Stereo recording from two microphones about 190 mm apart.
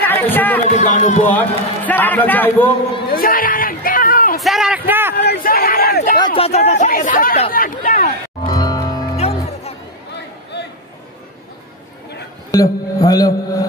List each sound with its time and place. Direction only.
0.0 s speech: 10° left (ahead or behind)
0.7 s speech: 35° left (ahead or behind)
1.3 s a man's voice: 10° left (ahead or behind)
3.1 s a sound: 50° left (ahead or behind)
4.4 s a man's voice: centre (ahead or behind)
5.1 s speech: 55° left (ahead or behind)
6.1 s speech: 25° left (ahead or behind); by 8.1 s 50° left (ahead or behind)
8.5 s music: 20° left (ahead or behind)
9.1 s music: 35° left (ahead or behind)
12.4 s a man's voice: 20° left (ahead or behind)